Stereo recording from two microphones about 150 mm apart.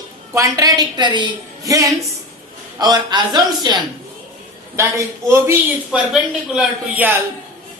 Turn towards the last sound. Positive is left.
turn(degrees=-10)  # may be behind; listen again after turning